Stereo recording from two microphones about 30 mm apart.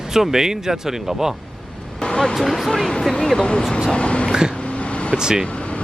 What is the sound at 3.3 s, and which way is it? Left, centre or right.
Speech, left.